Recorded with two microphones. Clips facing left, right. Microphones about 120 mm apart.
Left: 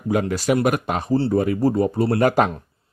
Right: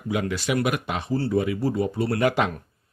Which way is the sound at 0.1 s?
40° left (ahead or behind).